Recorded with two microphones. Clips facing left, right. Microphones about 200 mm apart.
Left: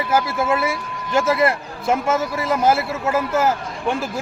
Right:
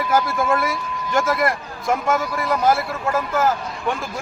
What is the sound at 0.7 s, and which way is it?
Speech, 25° left (ahead or behind).